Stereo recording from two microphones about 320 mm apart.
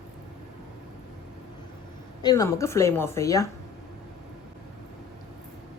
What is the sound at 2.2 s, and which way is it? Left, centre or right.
A woman's voice, centre.